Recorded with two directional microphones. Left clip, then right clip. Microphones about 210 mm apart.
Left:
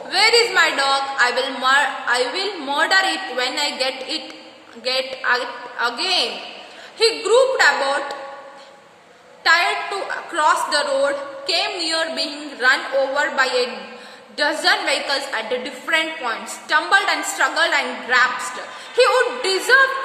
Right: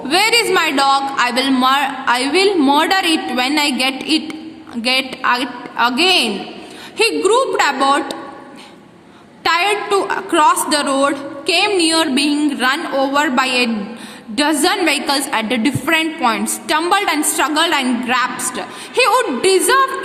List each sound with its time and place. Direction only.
0.1 s a woman's voice: 50° right (ahead or behind)
9.4 s a woman's voice: 50° right (ahead or behind)